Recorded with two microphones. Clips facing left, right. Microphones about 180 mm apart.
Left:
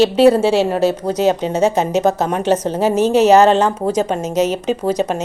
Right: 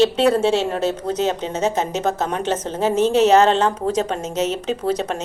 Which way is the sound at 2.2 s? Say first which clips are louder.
Left 6 dB; 10° left (ahead or behind).